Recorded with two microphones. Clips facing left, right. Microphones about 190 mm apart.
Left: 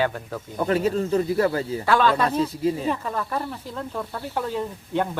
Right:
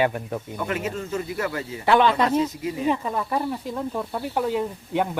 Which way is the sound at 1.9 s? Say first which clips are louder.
Right 2 dB; 20° right (ahead or behind).